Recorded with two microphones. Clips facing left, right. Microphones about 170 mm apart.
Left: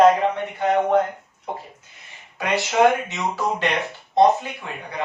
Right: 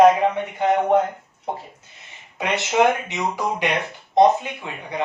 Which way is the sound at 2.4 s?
20° right (ahead or behind).